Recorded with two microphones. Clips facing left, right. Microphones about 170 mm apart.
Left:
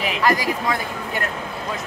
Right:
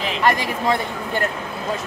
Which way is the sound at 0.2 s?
25° right (ahead or behind).